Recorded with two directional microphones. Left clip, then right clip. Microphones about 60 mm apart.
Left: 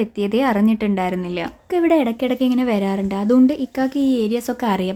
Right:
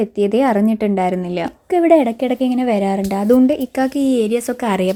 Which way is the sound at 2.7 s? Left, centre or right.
Right.